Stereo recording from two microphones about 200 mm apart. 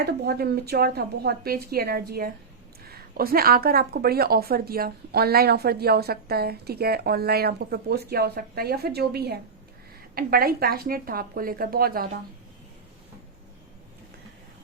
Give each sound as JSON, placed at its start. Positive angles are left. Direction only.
{"t": 0.0, "sound": "speech", "side_deg": -50}